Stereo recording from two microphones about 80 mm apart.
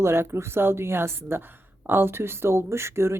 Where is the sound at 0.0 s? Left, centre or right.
Right.